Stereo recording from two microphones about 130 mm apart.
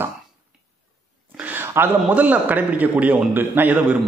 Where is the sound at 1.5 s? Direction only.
15° right (ahead or behind).